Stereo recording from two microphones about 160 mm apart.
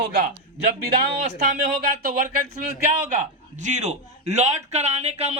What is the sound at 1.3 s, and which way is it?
Speech, 50° right (ahead or behind).